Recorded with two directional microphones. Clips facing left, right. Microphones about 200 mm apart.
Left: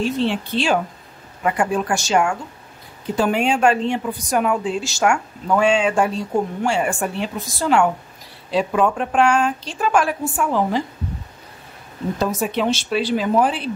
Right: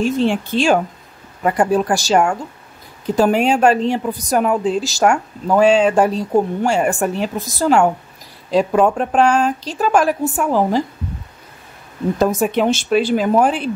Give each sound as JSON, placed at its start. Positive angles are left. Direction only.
{"t": 0.0, "sound": "a woman's voice", "side_deg": -45}
{"t": 12.2, "sound": "speech", "side_deg": -50}